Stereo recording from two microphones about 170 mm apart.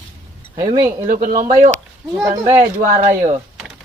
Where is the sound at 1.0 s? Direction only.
55° right (ahead or behind).